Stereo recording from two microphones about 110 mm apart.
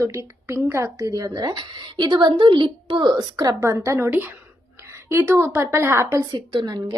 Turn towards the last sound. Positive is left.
turn(degrees=-35)  # may be behind; listen again after turning